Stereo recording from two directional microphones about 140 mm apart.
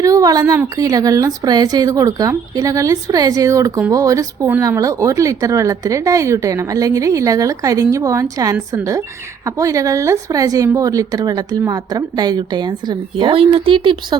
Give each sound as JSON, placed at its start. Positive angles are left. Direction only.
{"t": 0.0, "sound": "speech", "side_deg": -25}